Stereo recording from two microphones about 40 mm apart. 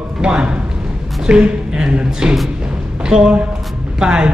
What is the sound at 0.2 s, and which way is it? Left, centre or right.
A woman's voice, right.